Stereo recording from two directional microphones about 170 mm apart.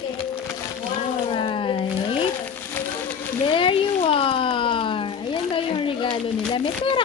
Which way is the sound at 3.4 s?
30° left (ahead or behind).